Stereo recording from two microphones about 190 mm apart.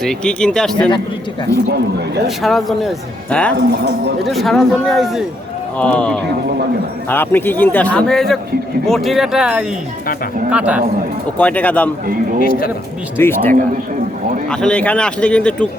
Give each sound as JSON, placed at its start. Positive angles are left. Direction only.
{"t": 0.0, "sound": "speech", "side_deg": 5}
{"t": 2.2, "sound": "speech", "side_deg": 0}
{"t": 3.5, "sound": "speech", "side_deg": -60}
{"t": 4.2, "sound": "a man's voice", "side_deg": 0}
{"t": 11.3, "sound": "a man's voice", "side_deg": 10}
{"t": 12.5, "sound": "speech", "side_deg": 50}
{"t": 13.1, "sound": "a man's voice", "side_deg": 10}
{"t": 14.5, "sound": "speech", "side_deg": 5}